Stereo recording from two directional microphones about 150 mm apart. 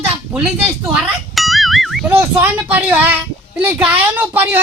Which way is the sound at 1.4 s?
Centre (ahead or behind).